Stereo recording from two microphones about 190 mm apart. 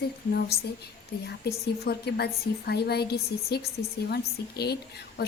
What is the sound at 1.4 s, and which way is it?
A woman's voice, 60° left (ahead or behind).